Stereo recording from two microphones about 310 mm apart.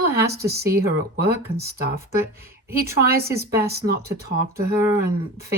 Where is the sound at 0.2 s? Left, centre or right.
Right.